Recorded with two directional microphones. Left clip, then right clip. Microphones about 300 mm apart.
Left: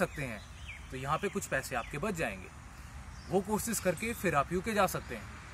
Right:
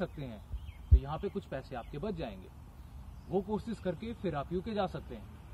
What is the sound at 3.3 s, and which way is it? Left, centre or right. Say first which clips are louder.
Speech: left 3 dB; left.